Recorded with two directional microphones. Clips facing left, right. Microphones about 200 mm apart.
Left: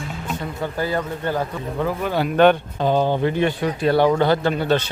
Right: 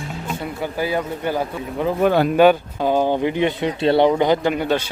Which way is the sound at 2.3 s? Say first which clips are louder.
Right 1 dB; 5° right (ahead or behind).